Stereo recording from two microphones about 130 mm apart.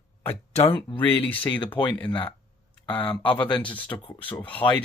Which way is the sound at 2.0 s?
35° left (ahead or behind).